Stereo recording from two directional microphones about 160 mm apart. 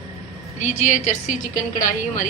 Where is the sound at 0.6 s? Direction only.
50° left (ahead or behind).